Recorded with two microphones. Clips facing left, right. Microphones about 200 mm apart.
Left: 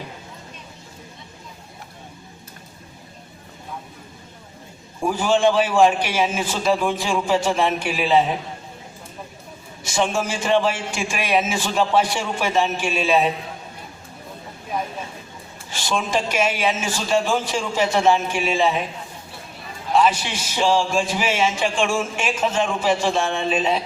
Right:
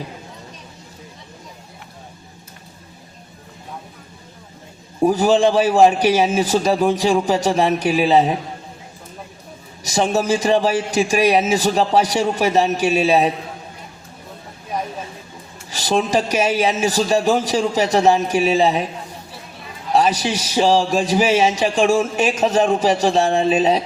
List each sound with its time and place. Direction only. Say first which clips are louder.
4.9 s a man's voice: right 5 dB; 40° right (ahead or behind)
9.8 s a man's voice: right 4 dB; 40° right (ahead or behind)
15.7 s a man's voice: right 5 dB; 40° right (ahead or behind)
19.9 s a man's voice: right 2 dB; 40° right (ahead or behind)